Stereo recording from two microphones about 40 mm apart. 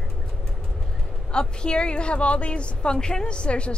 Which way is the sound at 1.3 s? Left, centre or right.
Left.